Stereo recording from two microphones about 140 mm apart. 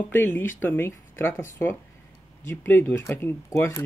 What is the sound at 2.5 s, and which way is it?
Speech, 15° left (ahead or behind).